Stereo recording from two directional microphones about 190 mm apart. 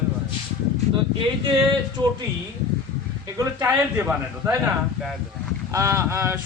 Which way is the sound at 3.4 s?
15° right (ahead or behind).